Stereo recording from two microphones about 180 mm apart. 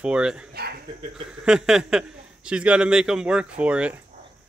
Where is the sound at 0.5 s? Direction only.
60° right (ahead or behind).